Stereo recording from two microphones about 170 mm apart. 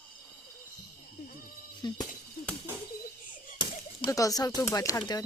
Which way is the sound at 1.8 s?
25° left (ahead or behind).